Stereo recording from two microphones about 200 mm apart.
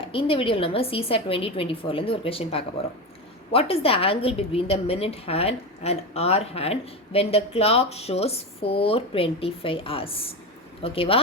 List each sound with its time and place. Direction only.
0.0 s a woman's voice: 25° left (ahead or behind)